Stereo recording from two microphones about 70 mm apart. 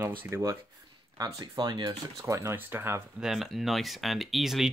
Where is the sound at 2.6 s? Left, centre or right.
Right.